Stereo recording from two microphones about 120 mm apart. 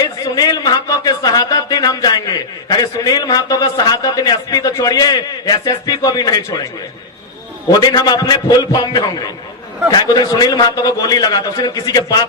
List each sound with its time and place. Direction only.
0.0 s a man's voice: 35° left (ahead or behind)
7.7 s a man's voice: 35° left (ahead or behind)